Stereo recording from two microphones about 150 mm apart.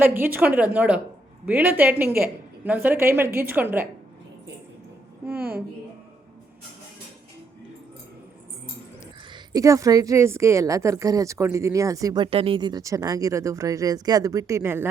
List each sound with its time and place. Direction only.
0.0 s a woman's voice: 15° right (ahead or behind)
5.2 s a sound: 15° right (ahead or behind)
9.3 s a woman's voice: 25° right (ahead or behind)